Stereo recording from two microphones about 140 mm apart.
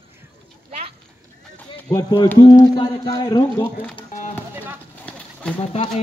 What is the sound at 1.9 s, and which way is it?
Speech, 30° left (ahead or behind).